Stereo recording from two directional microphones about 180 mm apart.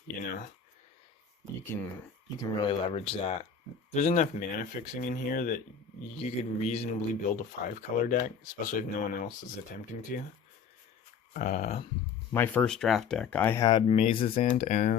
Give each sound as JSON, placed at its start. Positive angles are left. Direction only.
{"t": 1.7, "sound": "speech", "side_deg": 10}
{"t": 2.4, "sound": "a man's voice", "side_deg": 25}
{"t": 6.2, "sound": "a man's voice", "side_deg": 35}
{"t": 11.3, "sound": "speech", "side_deg": 45}
{"t": 12.3, "sound": "speech", "side_deg": 10}
{"t": 13.7, "sound": "speech", "side_deg": 25}